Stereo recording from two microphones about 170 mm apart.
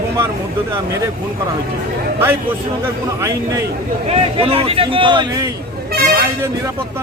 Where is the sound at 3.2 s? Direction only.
15° right (ahead or behind).